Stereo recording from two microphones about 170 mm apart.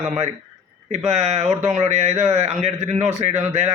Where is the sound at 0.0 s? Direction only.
45° right (ahead or behind).